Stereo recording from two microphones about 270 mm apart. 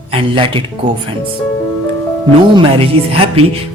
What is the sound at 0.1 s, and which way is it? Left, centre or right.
Speech, centre.